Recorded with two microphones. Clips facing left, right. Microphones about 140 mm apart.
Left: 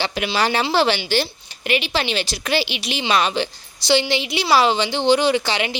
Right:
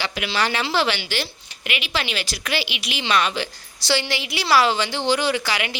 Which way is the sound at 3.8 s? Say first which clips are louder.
Left 5 dB; 20° left (ahead or behind).